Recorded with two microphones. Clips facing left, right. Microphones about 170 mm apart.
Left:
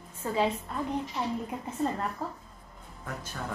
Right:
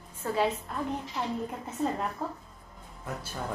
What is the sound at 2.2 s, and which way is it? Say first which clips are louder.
Speech: right 1 dB; centre (ahead or behind).